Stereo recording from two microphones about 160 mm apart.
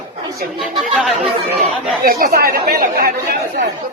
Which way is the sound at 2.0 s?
65° right (ahead or behind).